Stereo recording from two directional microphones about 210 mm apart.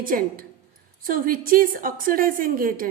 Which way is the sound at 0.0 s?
40° right (ahead or behind).